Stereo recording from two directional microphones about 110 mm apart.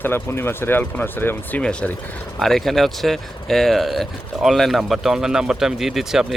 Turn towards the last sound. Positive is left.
turn(degrees=-5)  # may be behind; listen again after turning